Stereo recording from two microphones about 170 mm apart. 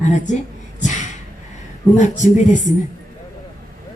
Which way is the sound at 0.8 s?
45° left (ahead or behind).